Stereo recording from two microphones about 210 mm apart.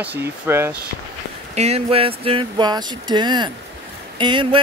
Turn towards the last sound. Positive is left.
turn(degrees=-25)  # may be behind; listen again after turning